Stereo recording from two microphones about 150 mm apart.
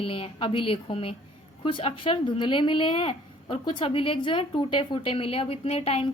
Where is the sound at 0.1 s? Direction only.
35° left (ahead or behind).